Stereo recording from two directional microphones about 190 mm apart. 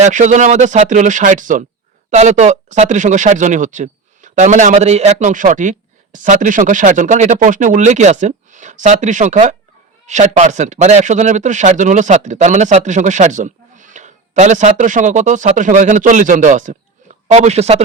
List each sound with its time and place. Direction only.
0.0 s speech: 40° right (ahead or behind)